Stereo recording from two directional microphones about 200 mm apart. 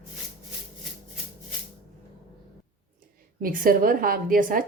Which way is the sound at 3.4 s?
45° right (ahead or behind).